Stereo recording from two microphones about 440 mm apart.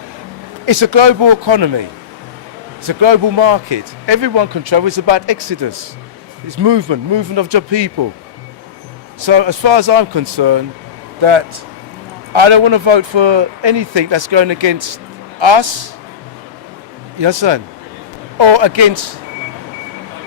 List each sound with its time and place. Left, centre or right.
0.6 s speech: right
9.2 s speech: right
11.2 s a man's voice: right
17.2 s speech: right